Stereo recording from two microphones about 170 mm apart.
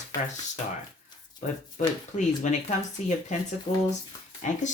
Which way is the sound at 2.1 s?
45° left (ahead or behind).